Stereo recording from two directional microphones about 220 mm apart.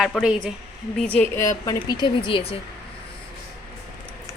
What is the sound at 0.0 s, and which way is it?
Speech, centre (ahead or behind).